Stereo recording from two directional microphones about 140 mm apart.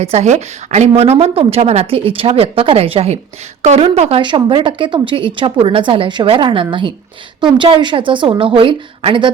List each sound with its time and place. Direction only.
0.0 s a woman's voice: 50° right (ahead or behind)
4.2 s a woman's voice: 35° right (ahead or behind)